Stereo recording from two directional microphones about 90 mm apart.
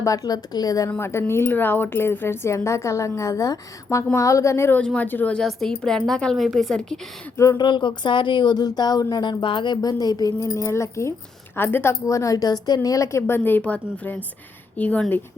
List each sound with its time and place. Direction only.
0.0 s a woman's voice: 40° left (ahead or behind)
0.9 s a woman's voice: 25° left (ahead or behind)
5.3 s a woman's voice: 5° left (ahead or behind)
7.5 s speech: 60° left (ahead or behind)
9.2 s speech: 65° left (ahead or behind)
9.8 s a woman's voice: 45° left (ahead or behind); by 11.9 s 25° left (ahead or behind)
12.0 s a woman's voice: 40° left (ahead or behind); by 15.0 s 15° left (ahead or behind)